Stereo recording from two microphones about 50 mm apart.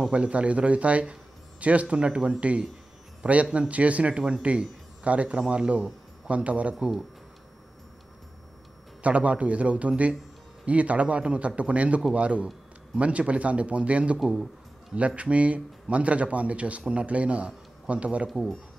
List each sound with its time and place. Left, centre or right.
0.1 s a man's voice: right
6.7 s speech: centre
9.0 s speech: right
14.2 s speech: centre
15.0 s speech: right